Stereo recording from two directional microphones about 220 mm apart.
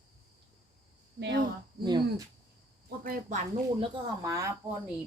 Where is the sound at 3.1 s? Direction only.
30° right (ahead or behind).